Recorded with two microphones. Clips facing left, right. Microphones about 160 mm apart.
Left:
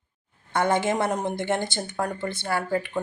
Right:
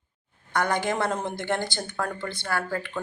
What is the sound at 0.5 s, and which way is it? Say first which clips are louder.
Speech: left 3 dB; 25° left (ahead or behind).